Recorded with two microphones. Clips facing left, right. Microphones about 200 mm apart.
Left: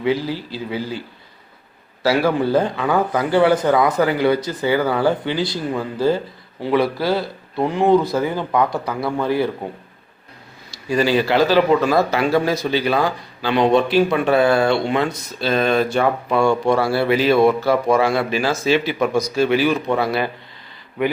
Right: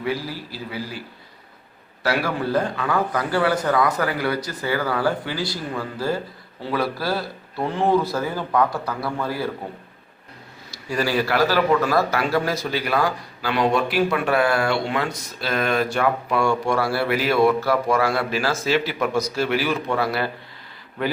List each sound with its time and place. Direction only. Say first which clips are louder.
0.0 s a man's voice: left 6 dB; 25° left (ahead or behind)
2.0 s a man's voice: left 6 dB; 25° left (ahead or behind)
10.8 s a man's voice: left 5 dB; 20° left (ahead or behind)